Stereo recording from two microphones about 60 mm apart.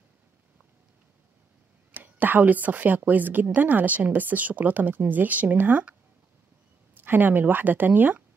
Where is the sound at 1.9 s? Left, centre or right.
Right.